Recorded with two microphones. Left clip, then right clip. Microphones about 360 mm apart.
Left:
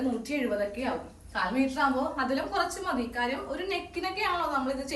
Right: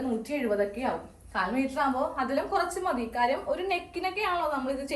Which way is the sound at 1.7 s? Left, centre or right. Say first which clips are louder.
Even; centre.